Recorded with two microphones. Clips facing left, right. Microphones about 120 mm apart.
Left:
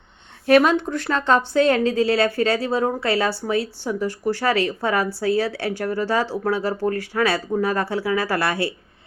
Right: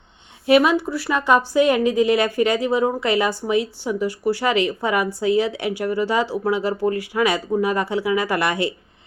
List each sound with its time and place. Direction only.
0.4 s a woman's voice: 10° right (ahead or behind)